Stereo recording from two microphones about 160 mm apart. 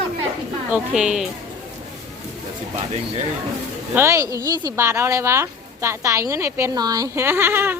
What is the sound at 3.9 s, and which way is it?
Speech, 15° right (ahead or behind).